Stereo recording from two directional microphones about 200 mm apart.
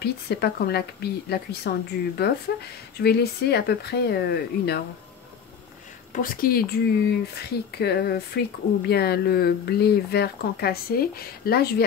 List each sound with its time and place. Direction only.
0.0 s speech: 55° left (ahead or behind)
6.1 s speech: 45° left (ahead or behind)